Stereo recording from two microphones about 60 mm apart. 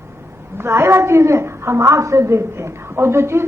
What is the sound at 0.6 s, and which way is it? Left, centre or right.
A woman's voice, right.